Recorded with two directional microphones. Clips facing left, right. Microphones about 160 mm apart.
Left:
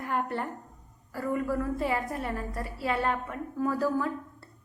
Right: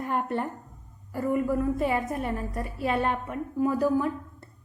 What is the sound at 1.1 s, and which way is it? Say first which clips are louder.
A woman's voice: right 4 dB; 20° right (ahead or behind).